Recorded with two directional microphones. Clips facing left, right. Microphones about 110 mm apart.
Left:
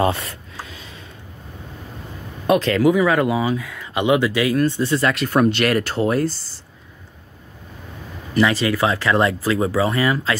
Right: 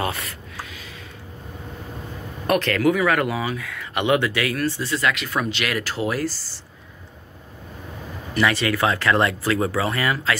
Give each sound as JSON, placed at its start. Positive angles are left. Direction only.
{"t": 0.0, "sound": "a sound", "side_deg": 30}
{"t": 2.4, "sound": "speech", "side_deg": 20}
{"t": 8.4, "sound": "speech", "side_deg": 25}